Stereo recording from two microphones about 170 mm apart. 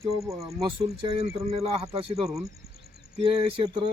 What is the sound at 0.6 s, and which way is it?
A man's voice, 35° right (ahead or behind).